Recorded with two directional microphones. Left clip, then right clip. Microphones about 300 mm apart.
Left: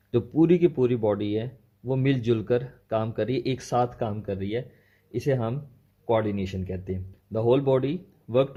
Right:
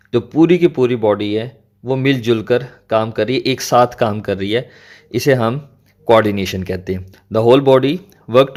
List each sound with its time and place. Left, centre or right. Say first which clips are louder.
0.1 s speech: right 9 dB; centre